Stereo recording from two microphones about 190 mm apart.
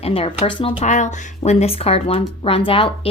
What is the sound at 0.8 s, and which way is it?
A woman's voice, 40° left (ahead or behind).